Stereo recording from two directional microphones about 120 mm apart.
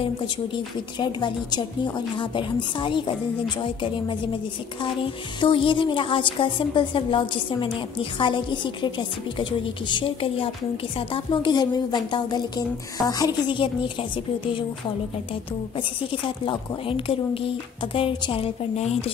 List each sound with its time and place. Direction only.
0.9 s a woman's voice: 40° left (ahead or behind)
16.1 s a woman's voice: 45° left (ahead or behind)